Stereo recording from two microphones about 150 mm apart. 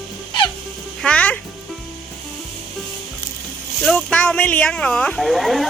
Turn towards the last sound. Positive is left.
turn(degrees=0)  # may be behind; listen again after turning